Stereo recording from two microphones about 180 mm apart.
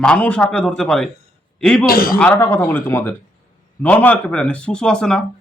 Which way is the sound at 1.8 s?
55° left (ahead or behind).